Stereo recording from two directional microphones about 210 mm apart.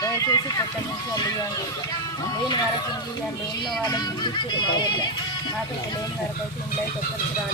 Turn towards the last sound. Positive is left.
turn(degrees=20)  # may be behind; listen again after turning